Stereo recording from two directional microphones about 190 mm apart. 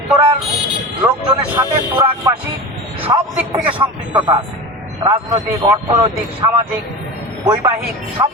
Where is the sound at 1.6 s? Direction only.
15° right (ahead or behind).